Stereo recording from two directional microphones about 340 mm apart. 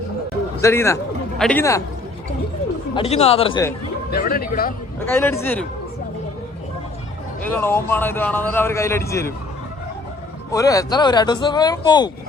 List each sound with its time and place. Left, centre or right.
0.6 s speech: centre
2.9 s speech: centre
4.1 s speech: left
5.0 s speech: centre
7.4 s speech: centre
10.5 s speech: centre